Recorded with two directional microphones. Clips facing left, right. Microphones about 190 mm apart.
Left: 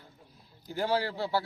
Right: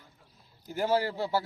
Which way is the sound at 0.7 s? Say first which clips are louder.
Right 2 dB; 15° right (ahead or behind).